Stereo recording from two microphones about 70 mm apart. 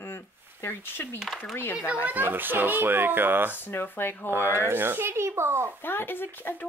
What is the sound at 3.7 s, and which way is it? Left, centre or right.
Speech, left.